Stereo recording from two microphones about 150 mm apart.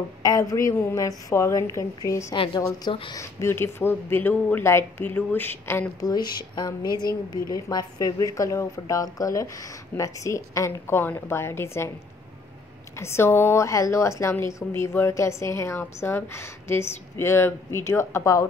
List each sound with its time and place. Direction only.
0.2 s speech: 25° left (ahead or behind)
2.3 s a woman's voice: 30° left (ahead or behind)
3.2 s a woman's voice: 15° left (ahead or behind)
13.0 s a woman's voice: 15° left (ahead or behind)